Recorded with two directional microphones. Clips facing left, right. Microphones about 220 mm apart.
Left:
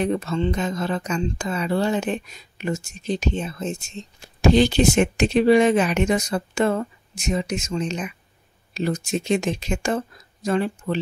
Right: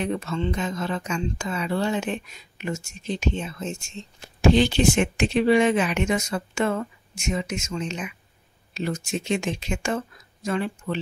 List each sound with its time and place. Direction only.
0.0 s a woman's voice: 40° left (ahead or behind)